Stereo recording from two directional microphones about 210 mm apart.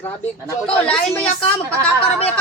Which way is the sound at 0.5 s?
5° left (ahead or behind).